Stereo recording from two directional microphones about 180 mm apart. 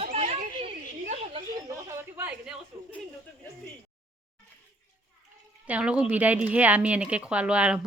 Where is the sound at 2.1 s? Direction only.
10° right (ahead or behind).